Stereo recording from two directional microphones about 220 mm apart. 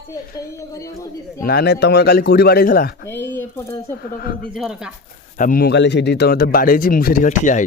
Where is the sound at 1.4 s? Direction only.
45° left (ahead or behind).